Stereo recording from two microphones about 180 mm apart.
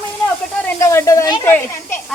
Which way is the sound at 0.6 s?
15° left (ahead or behind).